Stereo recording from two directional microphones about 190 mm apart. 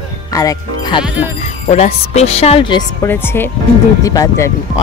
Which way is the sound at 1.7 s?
35° left (ahead or behind).